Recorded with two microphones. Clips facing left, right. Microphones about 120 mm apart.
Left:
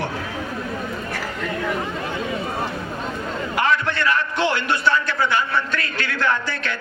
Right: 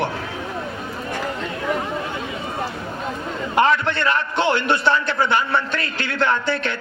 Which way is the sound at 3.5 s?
25° right (ahead or behind).